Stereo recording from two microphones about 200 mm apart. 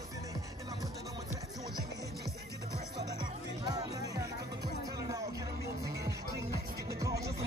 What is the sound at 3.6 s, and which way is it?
Music, 20° right (ahead or behind).